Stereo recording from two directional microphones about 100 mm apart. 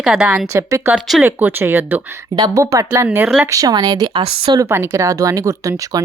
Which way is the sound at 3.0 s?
15° right (ahead or behind).